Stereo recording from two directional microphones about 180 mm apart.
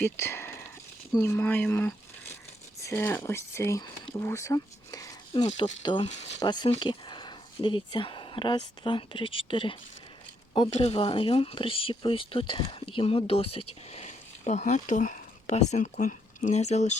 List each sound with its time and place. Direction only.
0.0 s speech: 15° left (ahead or behind)
5.3 s speech: 30° left (ahead or behind)
10.8 s speech: 35° left (ahead or behind)